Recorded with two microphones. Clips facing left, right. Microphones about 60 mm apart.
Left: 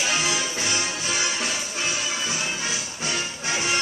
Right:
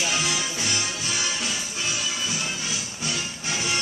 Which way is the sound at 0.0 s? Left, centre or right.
Left.